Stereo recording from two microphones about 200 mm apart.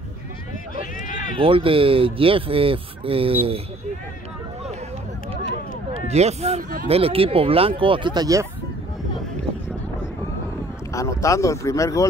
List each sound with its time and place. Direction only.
0.7 s run: 40° left (ahead or behind)
1.4 s speech: 25° right (ahead or behind)
5.9 s speech: 30° right (ahead or behind)
10.9 s speech: 15° left (ahead or behind)